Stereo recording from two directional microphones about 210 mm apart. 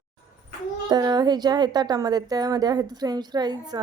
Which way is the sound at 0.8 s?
20° right (ahead or behind).